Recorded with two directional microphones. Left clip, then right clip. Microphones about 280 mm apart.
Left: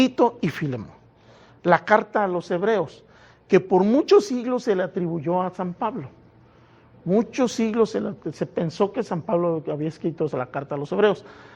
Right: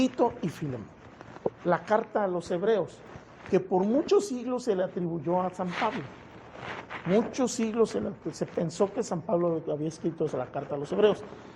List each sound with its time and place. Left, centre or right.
0.0 s a woman's voice: left
1.6 s a woman's voice: left
7.3 s speech: left